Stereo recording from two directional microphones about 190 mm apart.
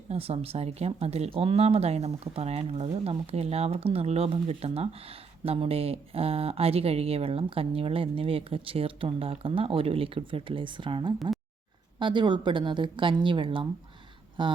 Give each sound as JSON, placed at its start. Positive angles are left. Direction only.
{"t": 0.1, "sound": "speech", "side_deg": -30}